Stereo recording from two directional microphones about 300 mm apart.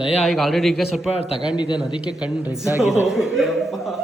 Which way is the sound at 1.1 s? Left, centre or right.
Centre.